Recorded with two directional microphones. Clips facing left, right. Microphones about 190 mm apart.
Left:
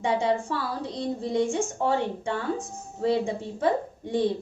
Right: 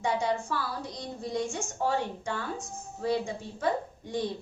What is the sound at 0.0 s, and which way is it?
A woman's voice, 25° left (ahead or behind).